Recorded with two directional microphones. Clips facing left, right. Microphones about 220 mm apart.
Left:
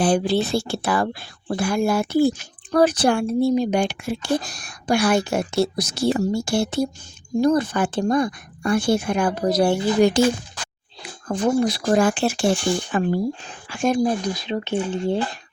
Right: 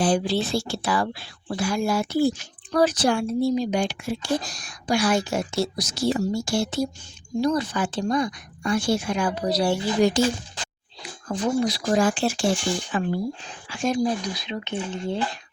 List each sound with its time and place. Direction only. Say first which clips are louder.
0.0 s speech: left 3 dB; 60° left (ahead or behind)
14.4 s speech: left 6 dB; 35° left (ahead or behind)